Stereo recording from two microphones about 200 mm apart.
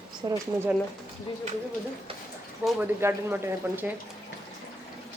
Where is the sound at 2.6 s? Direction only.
10° right (ahead or behind).